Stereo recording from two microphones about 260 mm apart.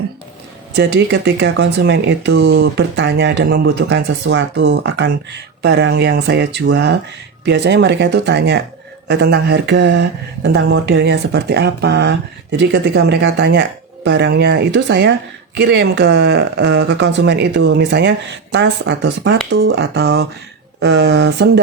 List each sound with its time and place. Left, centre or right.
0.9 s speech: right